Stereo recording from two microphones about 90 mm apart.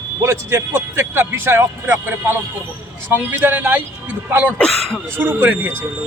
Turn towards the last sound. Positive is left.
turn(degrees=-20)  # may be behind; listen again after turning